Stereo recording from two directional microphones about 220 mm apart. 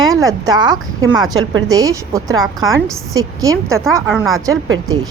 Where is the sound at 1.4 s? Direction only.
65° right (ahead or behind).